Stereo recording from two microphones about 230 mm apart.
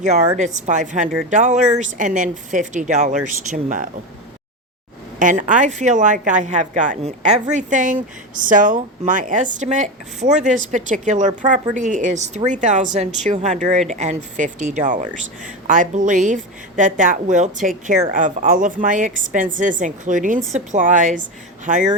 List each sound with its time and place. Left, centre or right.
0.3 s a woman's voice: right
5.2 s a woman's voice: right